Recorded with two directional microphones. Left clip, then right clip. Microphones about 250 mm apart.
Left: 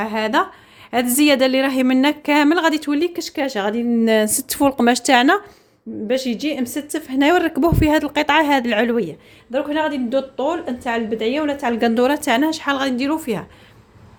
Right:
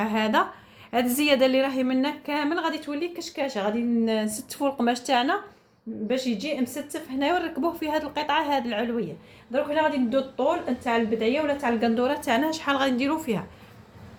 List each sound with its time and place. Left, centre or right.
0.0 s a woman's voice: left